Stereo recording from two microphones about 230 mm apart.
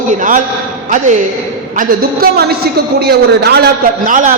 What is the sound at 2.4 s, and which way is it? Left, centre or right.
A man's voice, right.